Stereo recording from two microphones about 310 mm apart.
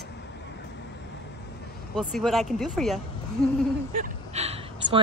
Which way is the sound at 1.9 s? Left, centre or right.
Centre.